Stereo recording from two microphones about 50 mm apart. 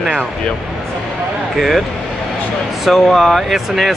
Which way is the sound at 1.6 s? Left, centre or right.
Centre.